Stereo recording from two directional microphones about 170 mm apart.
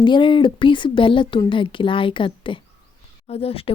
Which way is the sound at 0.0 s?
30° left (ahead or behind).